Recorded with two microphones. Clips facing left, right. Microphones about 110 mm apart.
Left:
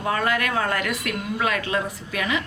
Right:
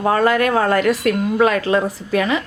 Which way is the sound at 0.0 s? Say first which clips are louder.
Right 8 dB; 35° right (ahead or behind).